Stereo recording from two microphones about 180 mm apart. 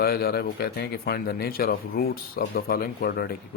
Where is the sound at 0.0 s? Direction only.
60° left (ahead or behind).